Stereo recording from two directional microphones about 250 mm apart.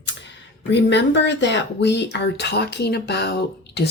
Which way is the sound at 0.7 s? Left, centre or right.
Left.